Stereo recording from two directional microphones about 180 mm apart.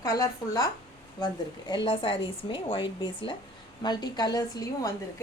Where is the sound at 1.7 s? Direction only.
25° left (ahead or behind).